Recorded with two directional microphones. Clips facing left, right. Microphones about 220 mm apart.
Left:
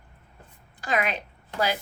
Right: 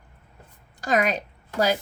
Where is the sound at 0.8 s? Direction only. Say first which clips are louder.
Right 4 dB; 40° right (ahead or behind).